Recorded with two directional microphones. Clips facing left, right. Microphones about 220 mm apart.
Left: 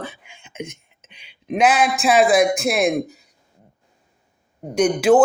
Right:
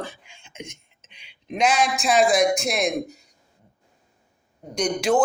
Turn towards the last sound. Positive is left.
turn(degrees=5)  # may be behind; listen again after turning